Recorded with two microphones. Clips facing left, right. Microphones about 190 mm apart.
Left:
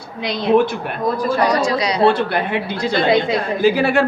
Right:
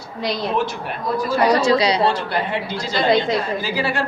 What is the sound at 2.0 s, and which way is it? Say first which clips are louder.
A man's voice: left 5 dB; 60° left (ahead or behind).